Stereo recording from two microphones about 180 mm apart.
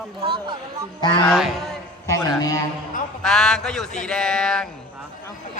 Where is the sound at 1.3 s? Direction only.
Centre (ahead or behind).